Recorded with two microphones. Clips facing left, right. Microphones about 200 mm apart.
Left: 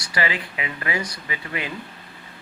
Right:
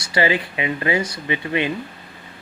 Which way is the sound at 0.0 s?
25° right (ahead or behind).